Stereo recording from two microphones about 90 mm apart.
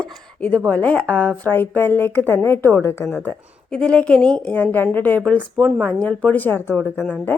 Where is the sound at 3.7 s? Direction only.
10° left (ahead or behind).